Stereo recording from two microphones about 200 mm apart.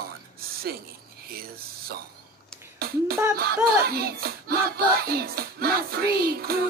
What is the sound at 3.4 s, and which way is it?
Music, 50° right (ahead or behind).